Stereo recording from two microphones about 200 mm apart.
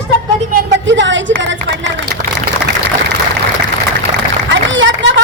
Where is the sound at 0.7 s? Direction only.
65° right (ahead or behind).